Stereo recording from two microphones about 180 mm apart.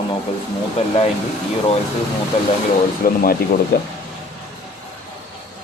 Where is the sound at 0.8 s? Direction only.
35° left (ahead or behind).